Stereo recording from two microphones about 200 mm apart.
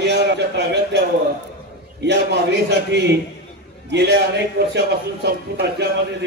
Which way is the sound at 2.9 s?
60° right (ahead or behind).